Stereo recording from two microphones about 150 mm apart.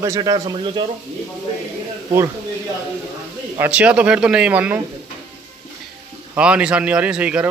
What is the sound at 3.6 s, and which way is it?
A man's voice, 10° right (ahead or behind).